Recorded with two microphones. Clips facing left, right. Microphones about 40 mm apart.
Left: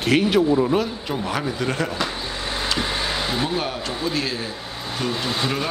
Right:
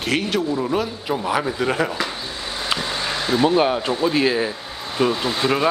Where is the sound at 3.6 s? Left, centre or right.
Right.